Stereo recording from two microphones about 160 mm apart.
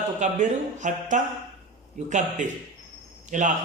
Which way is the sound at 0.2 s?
50° right (ahead or behind).